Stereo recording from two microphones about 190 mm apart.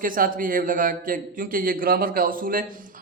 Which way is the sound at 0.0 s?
45° right (ahead or behind).